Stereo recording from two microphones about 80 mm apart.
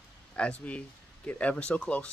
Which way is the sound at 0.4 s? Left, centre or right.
Centre.